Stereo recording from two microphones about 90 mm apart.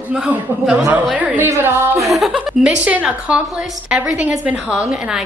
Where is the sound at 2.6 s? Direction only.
15° right (ahead or behind).